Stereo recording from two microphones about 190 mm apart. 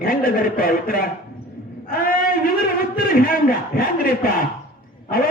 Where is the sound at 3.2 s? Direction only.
50° left (ahead or behind).